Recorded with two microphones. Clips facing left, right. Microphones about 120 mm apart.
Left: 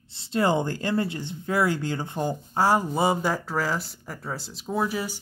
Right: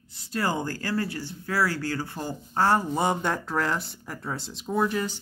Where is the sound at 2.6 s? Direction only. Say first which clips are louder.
Left 1 dB; 10° left (ahead or behind).